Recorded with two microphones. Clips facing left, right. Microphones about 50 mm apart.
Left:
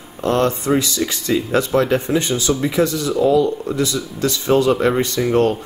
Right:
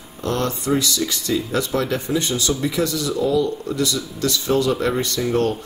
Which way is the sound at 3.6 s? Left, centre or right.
Left.